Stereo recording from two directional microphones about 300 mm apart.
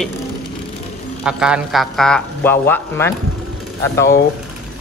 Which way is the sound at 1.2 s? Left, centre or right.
Centre.